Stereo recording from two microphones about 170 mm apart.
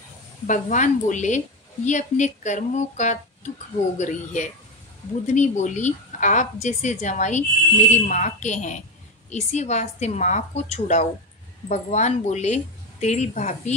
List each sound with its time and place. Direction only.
0.5 s a woman's voice: 45° left (ahead or behind)